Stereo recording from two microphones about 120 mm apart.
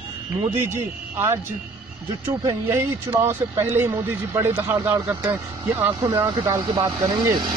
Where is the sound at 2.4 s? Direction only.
30° right (ahead or behind).